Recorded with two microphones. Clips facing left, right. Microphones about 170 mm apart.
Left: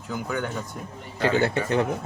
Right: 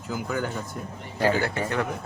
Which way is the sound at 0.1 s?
Centre (ahead or behind).